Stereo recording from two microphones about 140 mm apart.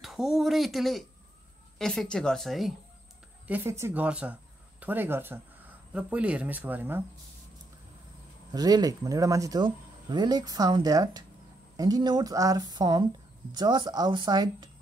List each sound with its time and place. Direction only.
0.0 s speech: centre (ahead or behind)
3.4 s speech: 15° right (ahead or behind)
8.5 s a woman's voice: 30° right (ahead or behind)